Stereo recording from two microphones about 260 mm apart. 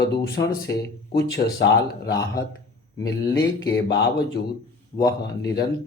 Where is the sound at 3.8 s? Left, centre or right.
Left.